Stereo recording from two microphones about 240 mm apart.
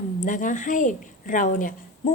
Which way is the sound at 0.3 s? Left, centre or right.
Left.